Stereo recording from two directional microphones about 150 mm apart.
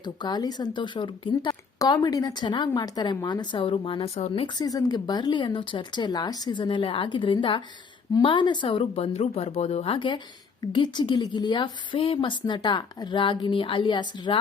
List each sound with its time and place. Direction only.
0.0 s speech: 30° left (ahead or behind)
4.5 s speech: 25° left (ahead or behind)